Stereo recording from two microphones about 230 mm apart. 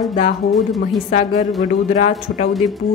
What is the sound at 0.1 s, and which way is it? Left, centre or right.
A woman's voice, left.